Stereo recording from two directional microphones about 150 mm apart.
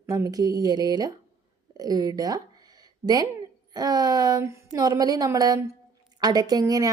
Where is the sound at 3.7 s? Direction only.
25° right (ahead or behind).